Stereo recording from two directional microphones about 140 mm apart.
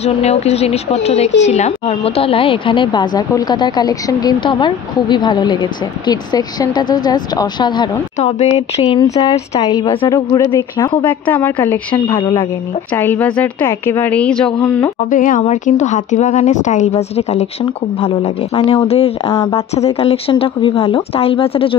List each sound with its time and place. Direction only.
0.0 s speech: 50° left (ahead or behind); by 8.0 s 30° left (ahead or behind)
8.2 s speech: 50° left (ahead or behind)
8.8 s a woman's voice: 30° left (ahead or behind); by 11.8 s 15° left (ahead or behind)
12.9 s a woman's voice: 15° left (ahead or behind)
14.6 s a woman's voice: 15° left (ahead or behind)
15.0 s a woman's voice: 70° left (ahead or behind); by 21.7 s 40° left (ahead or behind)